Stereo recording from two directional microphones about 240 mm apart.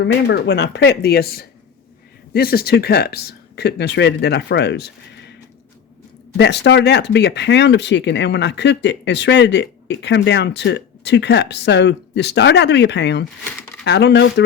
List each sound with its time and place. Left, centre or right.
0.0 s speech: left
6.3 s speech: left